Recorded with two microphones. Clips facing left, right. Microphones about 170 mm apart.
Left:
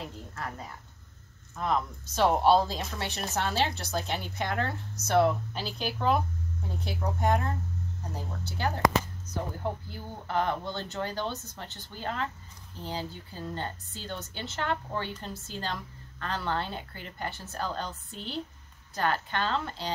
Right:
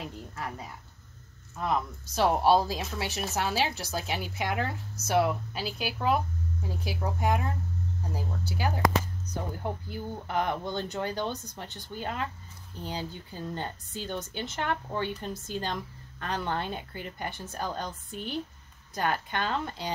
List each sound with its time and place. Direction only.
1.6 s a woman's voice: 10° right (ahead or behind)